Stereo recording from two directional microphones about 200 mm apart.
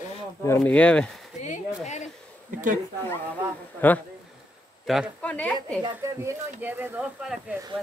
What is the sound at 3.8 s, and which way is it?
Speech, 10° left (ahead or behind).